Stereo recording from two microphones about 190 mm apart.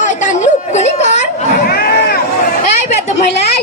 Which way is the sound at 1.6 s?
55° left (ahead or behind).